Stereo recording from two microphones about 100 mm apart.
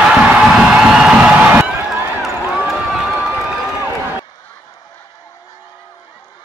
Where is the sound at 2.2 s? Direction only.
5° right (ahead or behind).